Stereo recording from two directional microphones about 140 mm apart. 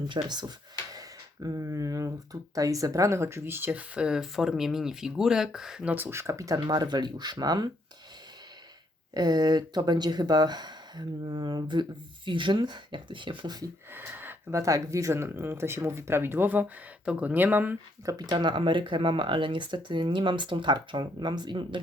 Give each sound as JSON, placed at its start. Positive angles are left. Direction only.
{"t": 0.1, "sound": "speech", "side_deg": -30}
{"t": 9.1, "sound": "speech", "side_deg": -30}
{"t": 13.9, "sound": "speech", "side_deg": -15}
{"t": 18.0, "sound": "speech", "side_deg": -25}